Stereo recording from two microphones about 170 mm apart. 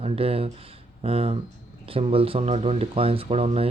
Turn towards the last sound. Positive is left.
turn(degrees=-35)  # may be behind; listen again after turning